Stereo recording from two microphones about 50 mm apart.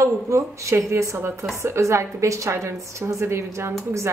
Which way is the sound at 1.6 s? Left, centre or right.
Right.